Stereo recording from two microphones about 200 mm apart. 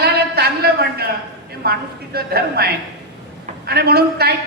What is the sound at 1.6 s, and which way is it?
A man's voice, 50° right (ahead or behind).